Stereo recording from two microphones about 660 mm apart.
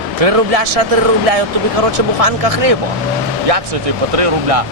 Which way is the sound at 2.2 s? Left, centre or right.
Right.